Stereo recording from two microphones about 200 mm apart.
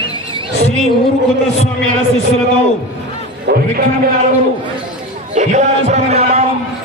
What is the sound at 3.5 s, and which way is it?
Speech, 55° right (ahead or behind).